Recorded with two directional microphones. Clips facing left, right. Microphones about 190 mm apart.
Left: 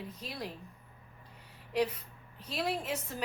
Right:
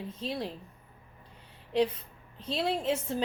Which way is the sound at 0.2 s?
25° right (ahead or behind).